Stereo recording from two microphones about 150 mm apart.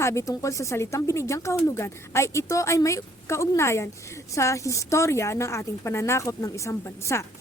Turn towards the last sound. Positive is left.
turn(degrees=20)  # may be behind; listen again after turning